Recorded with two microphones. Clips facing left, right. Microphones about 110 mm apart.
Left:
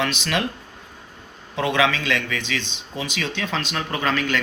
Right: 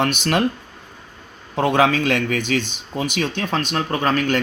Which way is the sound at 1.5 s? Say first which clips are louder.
Right 4 dB; 45° right (ahead or behind).